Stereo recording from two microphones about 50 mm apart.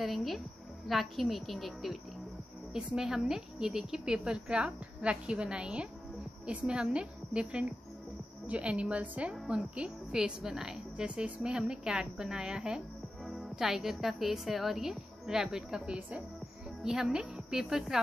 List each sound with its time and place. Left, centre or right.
0.0 s a woman's voice: centre
3.0 s a woman's voice: centre
13.2 s a woman's voice: centre